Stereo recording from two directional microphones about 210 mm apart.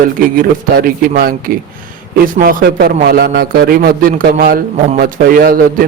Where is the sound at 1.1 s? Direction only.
45° right (ahead or behind).